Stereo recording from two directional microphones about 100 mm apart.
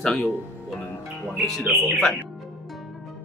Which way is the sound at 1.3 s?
Centre (ahead or behind).